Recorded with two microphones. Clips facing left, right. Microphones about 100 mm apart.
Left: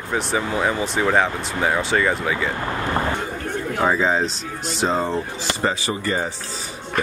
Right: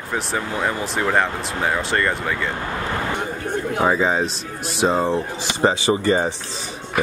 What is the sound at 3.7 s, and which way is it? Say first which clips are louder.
Speech: even; 10° right (ahead or behind).